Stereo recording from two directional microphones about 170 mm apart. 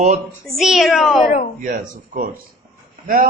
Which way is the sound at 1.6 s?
55° right (ahead or behind).